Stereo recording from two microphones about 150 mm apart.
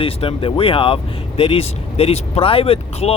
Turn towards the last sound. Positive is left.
turn(degrees=40)  # may be behind; listen again after turning